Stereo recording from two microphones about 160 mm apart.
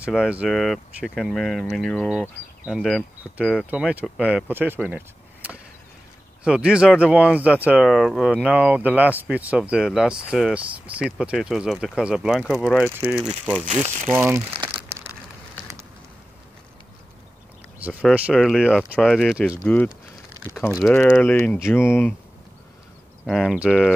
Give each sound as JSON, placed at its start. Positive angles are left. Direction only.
{"t": 0.0, "sound": "speech", "side_deg": -5}
{"t": 4.8, "sound": "a sound", "side_deg": -10}
{"t": 6.4, "sound": "speech", "side_deg": -5}
{"t": 13.8, "sound": "speech", "side_deg": -45}
{"t": 14.1, "sound": "speech", "side_deg": -15}
{"t": 18.3, "sound": "speech", "side_deg": 5}
{"t": 19.6, "sound": "speech", "side_deg": 10}
{"t": 20.9, "sound": "speech", "side_deg": 10}
{"t": 23.2, "sound": "speech", "side_deg": 0}